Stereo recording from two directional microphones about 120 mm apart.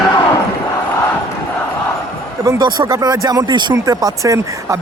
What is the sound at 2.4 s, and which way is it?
Speech, 35° right (ahead or behind).